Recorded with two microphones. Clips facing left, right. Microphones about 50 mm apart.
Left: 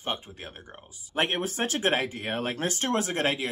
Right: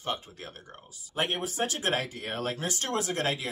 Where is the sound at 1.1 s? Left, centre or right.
Left.